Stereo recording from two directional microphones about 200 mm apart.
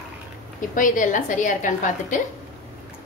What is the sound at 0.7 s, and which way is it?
A woman's voice, 40° left (ahead or behind).